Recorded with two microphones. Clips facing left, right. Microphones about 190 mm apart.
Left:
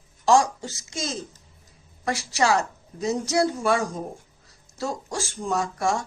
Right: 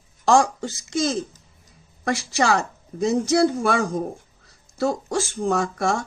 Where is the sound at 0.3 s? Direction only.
55° right (ahead or behind).